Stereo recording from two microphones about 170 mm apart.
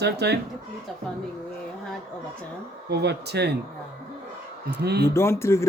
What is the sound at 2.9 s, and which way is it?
Speech, 75° right (ahead or behind).